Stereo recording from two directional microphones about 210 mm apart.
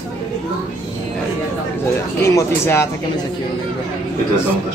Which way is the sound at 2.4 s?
10° left (ahead or behind).